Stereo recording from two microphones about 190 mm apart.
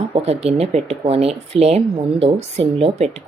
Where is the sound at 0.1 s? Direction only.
35° right (ahead or behind).